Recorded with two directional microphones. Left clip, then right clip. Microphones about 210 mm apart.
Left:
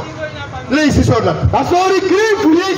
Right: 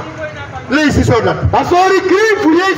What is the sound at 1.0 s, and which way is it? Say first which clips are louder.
A man's voice: right 2 dB; 25° right (ahead or behind).